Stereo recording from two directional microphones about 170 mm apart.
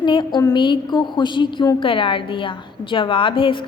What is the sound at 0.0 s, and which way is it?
A woman's voice, 25° left (ahead or behind).